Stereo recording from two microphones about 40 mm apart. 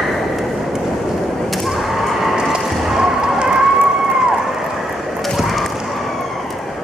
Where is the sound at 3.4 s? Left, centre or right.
Centre.